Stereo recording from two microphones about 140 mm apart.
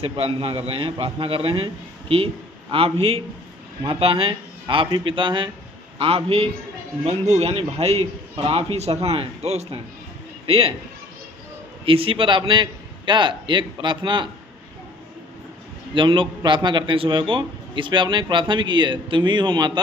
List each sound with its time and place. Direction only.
0.0 s a man's voice: 40° right (ahead or behind)
7.0 s a man's voice: 50° right (ahead or behind)
11.9 s a man's voice: 40° right (ahead or behind)
16.0 s a man's voice: 35° right (ahead or behind)